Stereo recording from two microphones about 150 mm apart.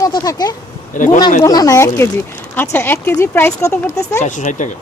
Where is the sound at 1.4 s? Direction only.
25° left (ahead or behind).